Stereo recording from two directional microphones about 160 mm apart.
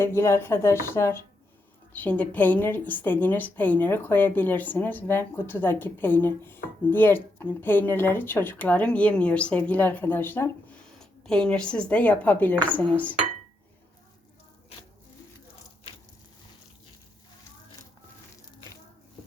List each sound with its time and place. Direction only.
0.0 s a woman's voice: 15° left (ahead or behind)